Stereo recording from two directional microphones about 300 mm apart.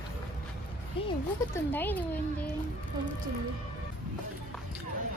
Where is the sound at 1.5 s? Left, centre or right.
Centre.